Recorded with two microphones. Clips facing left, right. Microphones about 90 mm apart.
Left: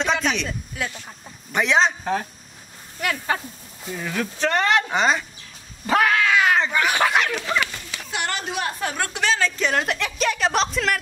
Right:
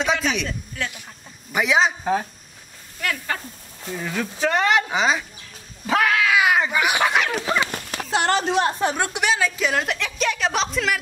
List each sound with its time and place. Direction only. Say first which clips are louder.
0.0 s a sound: even; centre (ahead or behind)
0.8 s speech: left 1 dB; 10° left (ahead or behind)
1.5 s speech: even; 5° right (ahead or behind)
3.0 s speech: left 2 dB; 10° left (ahead or behind)
3.8 s speech: even; centre (ahead or behind)
7.4 s speech: right 1 dB; 20° right (ahead or behind)
7.7 s a sound: right 6 dB; 60° right (ahead or behind)
8.1 s a woman's voice: right 7 dB; 35° right (ahead or behind); by 11.0 s centre (ahead or behind)